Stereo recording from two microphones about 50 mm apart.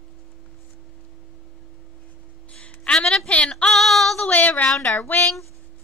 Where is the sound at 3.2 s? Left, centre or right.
Left.